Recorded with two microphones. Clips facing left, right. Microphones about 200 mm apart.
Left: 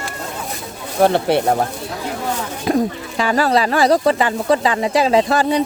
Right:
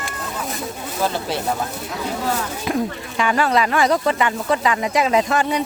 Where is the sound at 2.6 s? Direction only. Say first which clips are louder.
Left 7 dB; 35° left (ahead or behind).